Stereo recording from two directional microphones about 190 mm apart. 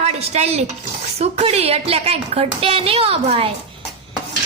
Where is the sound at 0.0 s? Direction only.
35° right (ahead or behind).